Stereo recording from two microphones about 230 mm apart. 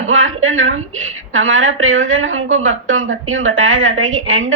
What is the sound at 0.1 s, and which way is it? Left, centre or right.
A woman's voice, right.